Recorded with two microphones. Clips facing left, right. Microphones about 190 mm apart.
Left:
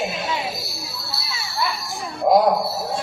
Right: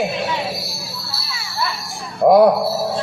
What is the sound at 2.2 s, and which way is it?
Speech, 60° right (ahead or behind).